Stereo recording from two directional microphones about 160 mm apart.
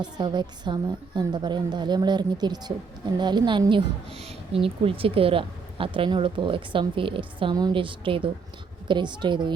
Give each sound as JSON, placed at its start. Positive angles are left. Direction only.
{"t": 0.2, "sound": "a woman's voice", "side_deg": -30}